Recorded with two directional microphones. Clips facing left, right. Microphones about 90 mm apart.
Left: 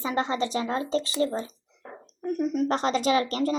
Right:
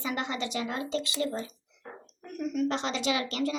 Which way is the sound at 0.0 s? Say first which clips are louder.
Left 6 dB; 35° left (ahead or behind).